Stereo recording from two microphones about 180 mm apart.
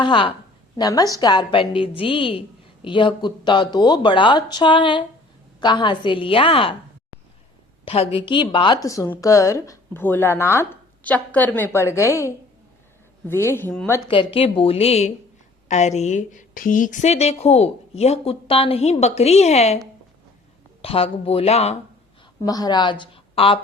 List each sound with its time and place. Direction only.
0.0 s speech: 25° left (ahead or behind)
7.9 s a woman's voice: 35° left (ahead or behind); by 14.0 s 10° left (ahead or behind)
14.1 s a woman's voice: 30° left (ahead or behind)
20.8 s a woman's voice: 30° left (ahead or behind)
22.4 s a woman's voice: 20° left (ahead or behind)